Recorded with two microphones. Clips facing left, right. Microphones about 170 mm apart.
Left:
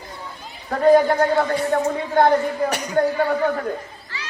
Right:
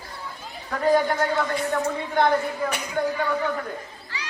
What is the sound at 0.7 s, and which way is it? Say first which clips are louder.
A man's voice: left 6 dB; 40° left (ahead or behind).